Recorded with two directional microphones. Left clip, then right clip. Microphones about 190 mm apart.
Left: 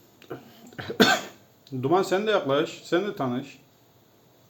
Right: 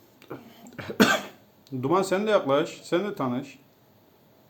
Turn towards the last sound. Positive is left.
turn(degrees=-5)  # may be behind; listen again after turning